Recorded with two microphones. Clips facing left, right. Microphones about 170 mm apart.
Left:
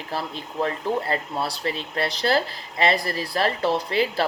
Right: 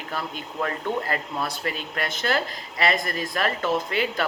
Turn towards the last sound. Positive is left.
turn(degrees=35)  # may be behind; listen again after turning